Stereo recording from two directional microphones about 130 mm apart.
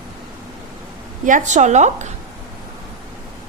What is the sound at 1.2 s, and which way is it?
Speech, 75° right (ahead or behind).